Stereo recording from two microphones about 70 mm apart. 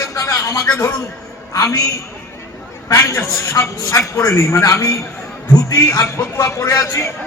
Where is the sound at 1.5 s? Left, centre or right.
Left.